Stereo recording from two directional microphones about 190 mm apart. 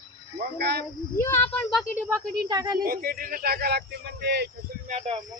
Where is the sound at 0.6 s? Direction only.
60° right (ahead or behind).